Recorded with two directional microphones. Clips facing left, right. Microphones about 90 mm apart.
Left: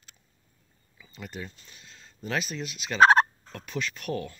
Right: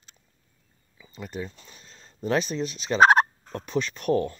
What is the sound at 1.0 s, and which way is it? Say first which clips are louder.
Speech: right 5 dB; 20° right (ahead or behind).